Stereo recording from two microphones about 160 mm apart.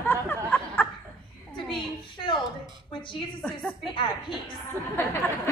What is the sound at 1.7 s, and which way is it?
Speech, 30° left (ahead or behind).